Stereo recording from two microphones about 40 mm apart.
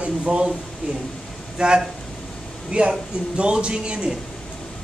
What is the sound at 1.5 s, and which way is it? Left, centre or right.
Speech, right.